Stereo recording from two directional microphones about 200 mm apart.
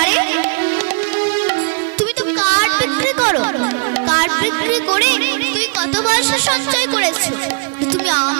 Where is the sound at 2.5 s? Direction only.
15° right (ahead or behind).